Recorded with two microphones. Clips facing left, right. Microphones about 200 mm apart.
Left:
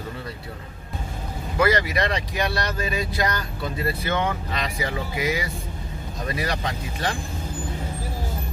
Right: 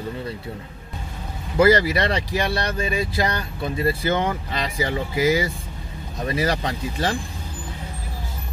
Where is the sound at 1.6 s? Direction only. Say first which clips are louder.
Right 5 dB; 30° right (ahead or behind).